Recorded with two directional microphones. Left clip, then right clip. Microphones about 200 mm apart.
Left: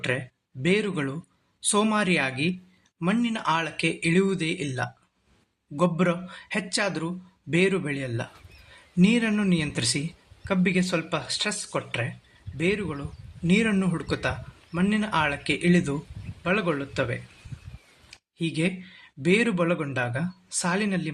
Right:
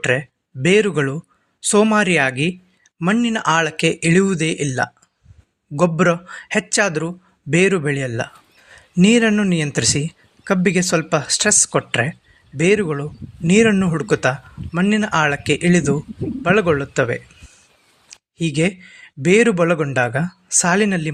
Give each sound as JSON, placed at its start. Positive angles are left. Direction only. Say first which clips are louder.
{"t": 0.0, "sound": "speech", "louder": "right 10 dB", "side_deg": -35}